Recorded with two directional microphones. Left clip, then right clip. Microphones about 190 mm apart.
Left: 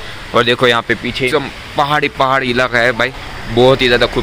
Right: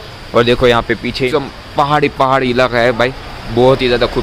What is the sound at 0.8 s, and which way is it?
Speech, 20° right (ahead or behind).